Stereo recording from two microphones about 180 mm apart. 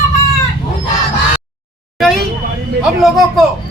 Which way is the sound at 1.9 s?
Centre (ahead or behind).